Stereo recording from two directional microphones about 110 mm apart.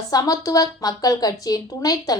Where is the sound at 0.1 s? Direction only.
35° left (ahead or behind).